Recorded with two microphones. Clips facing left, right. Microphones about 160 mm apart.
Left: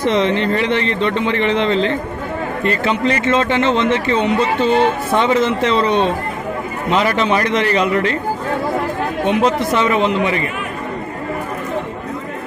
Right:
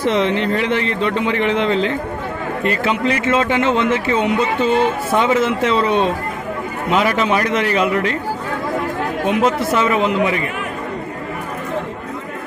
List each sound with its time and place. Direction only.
0.0 s a man's voice: 5° right (ahead or behind)
9.2 s a man's voice: centre (ahead or behind)